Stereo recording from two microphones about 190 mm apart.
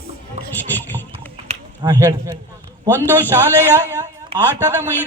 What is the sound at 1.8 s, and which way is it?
Speech, 15° right (ahead or behind).